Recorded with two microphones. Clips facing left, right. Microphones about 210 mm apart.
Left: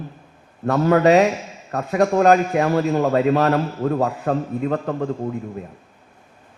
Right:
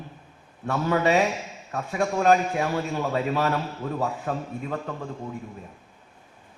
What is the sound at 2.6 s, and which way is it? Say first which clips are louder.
A man's voice: left 8 dB; 50° left (ahead or behind).